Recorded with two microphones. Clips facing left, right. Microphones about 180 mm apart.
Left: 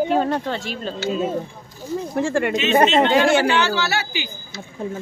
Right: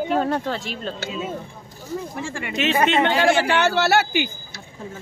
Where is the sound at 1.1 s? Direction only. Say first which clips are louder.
Left 10 dB; 40° left (ahead or behind).